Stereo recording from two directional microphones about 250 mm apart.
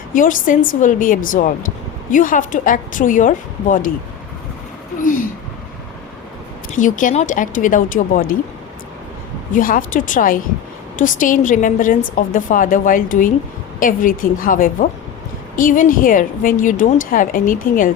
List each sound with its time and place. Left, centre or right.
0.1 s a woman's voice: left
6.7 s a woman's voice: left
9.5 s a woman's voice: left